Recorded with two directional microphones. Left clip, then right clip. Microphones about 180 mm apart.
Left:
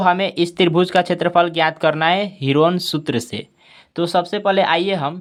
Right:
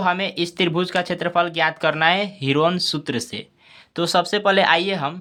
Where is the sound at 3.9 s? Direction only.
15° left (ahead or behind).